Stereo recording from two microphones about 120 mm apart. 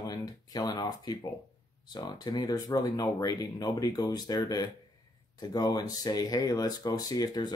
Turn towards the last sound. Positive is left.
turn(degrees=35)  # may be behind; listen again after turning